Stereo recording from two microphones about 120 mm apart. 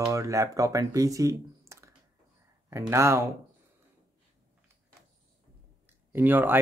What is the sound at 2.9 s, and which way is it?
Speech, 25° right (ahead or behind).